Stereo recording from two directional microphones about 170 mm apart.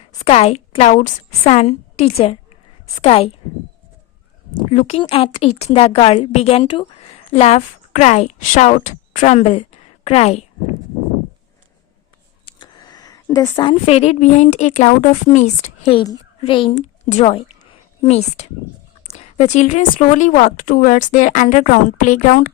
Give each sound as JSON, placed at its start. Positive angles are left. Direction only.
{"t": 0.2, "sound": "a woman's voice", "side_deg": 40}
{"t": 4.7, "sound": "a woman's voice", "side_deg": 40}
{"t": 12.5, "sound": "a sound", "side_deg": 25}
{"t": 13.8, "sound": "a woman's voice", "side_deg": 40}
{"t": 15.8, "sound": "a woman's voice", "side_deg": 30}
{"t": 16.7, "sound": "a woman's voice", "side_deg": 45}